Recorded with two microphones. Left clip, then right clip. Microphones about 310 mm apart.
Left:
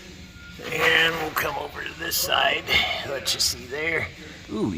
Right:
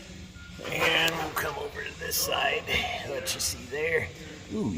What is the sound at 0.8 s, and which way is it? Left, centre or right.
Dog, centre.